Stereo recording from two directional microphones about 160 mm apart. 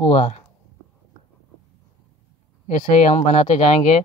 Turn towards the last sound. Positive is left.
turn(degrees=45)  # may be behind; listen again after turning